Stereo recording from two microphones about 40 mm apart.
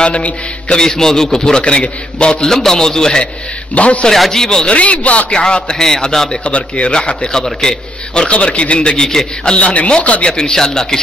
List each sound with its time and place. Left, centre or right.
0.0 s a man's voice: left
0.7 s a man's voice: centre
2.4 s a man's voice: centre
3.7 s speech: left
4.1 s a man's voice: centre
4.6 s speech: left
5.3 s a man's voice: centre
6.4 s a man's voice: left
7.6 s a man's voice: centre
8.1 s a man's voice: left
9.4 s a man's voice: left
10.2 s a man's voice: centre